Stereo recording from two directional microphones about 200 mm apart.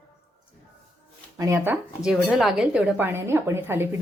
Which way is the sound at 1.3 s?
15° right (ahead or behind).